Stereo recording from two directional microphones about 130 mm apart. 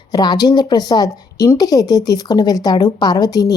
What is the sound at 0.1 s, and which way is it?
A woman's voice, 30° left (ahead or behind).